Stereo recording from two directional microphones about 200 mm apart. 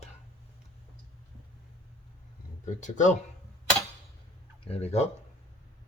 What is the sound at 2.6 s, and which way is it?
Speech, 40° left (ahead or behind).